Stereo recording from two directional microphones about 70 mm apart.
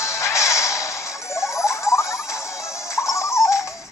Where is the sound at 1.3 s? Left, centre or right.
Left.